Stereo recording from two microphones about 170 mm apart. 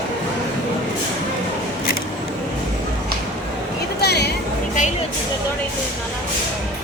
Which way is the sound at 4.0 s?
75° left (ahead or behind).